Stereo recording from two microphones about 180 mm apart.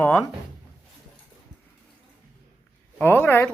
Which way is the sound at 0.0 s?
15° left (ahead or behind).